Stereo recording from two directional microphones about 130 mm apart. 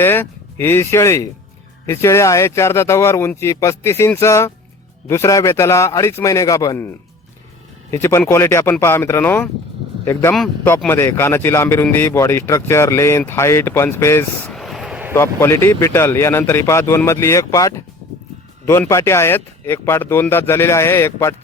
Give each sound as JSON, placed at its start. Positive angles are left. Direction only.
{"t": 0.0, "sound": "a man's voice", "side_deg": 15}
{"t": 7.9, "sound": "a man's voice", "side_deg": 20}
{"t": 14.4, "sound": "vehicle", "side_deg": 0}
{"t": 15.1, "sound": "a man's voice", "side_deg": 20}